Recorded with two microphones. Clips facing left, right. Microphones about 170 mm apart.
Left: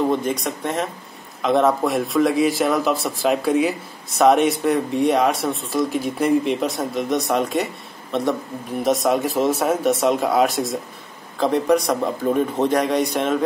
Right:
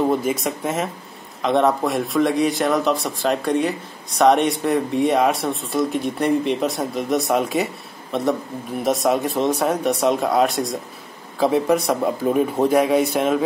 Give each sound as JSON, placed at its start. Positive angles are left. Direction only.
{"t": 0.1, "sound": "speech", "side_deg": -5}